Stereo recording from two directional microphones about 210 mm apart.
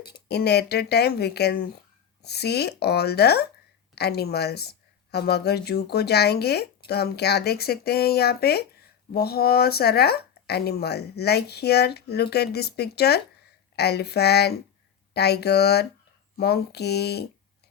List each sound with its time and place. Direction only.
0.3 s speech: 50° left (ahead or behind)